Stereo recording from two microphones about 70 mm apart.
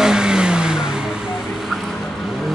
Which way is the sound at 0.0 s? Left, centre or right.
Centre.